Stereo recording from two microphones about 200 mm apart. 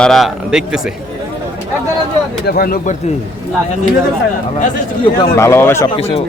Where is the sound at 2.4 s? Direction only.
50° left (ahead or behind).